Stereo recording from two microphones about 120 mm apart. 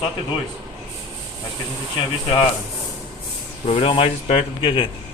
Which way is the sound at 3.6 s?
50° left (ahead or behind).